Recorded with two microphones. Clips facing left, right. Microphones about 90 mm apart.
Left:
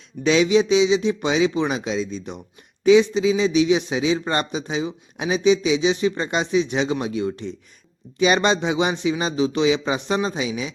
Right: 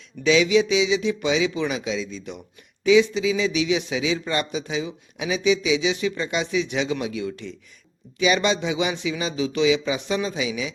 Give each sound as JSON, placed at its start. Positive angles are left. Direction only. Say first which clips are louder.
{"t": 0.2, "sound": "a man's voice", "louder": "left 1 dB", "side_deg": 40}
{"t": 8.2, "sound": "a man's voice", "louder": "left 3 dB", "side_deg": 45}